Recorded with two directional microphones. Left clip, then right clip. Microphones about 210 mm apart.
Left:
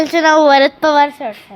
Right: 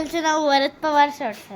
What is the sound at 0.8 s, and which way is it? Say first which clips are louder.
Speech: left 7 dB; 45° left (ahead or behind).